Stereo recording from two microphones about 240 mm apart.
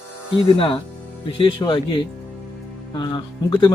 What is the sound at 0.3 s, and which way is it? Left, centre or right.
Speech, left.